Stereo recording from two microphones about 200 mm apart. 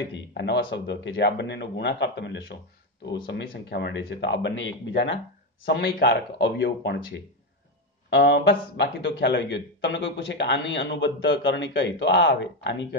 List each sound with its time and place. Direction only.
0.1 s a man's voice: 60° left (ahead or behind)
8.1 s a man's voice: 55° left (ahead or behind)